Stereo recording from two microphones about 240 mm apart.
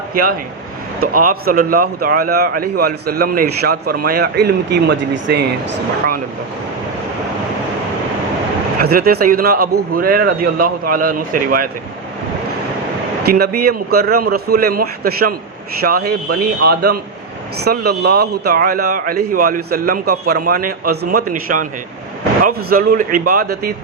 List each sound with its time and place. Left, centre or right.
0.1 s a man's voice: right
8.8 s a man's voice: right
13.2 s a man's voice: right